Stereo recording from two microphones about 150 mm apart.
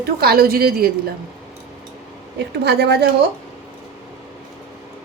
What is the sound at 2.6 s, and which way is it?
Speech, 90° right.